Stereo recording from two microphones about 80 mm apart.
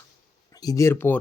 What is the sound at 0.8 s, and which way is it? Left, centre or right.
Speech, left.